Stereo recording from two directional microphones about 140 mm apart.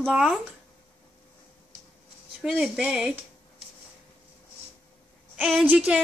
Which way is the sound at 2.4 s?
5° right (ahead or behind).